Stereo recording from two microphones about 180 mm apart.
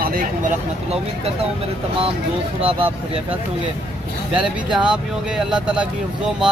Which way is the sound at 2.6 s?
30° right (ahead or behind).